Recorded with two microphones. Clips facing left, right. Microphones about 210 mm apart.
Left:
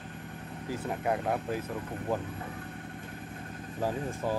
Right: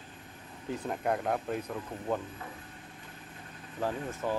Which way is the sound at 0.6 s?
5° left (ahead or behind).